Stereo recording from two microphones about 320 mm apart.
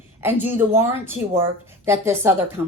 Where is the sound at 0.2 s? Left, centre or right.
Centre.